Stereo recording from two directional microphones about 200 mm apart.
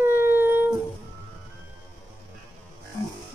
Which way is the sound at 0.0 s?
10° right (ahead or behind).